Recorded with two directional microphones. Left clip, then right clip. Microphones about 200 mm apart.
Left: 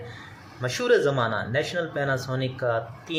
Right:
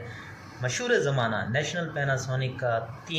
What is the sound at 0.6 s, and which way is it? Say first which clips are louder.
Speech: left 4 dB; 60° left (ahead or behind).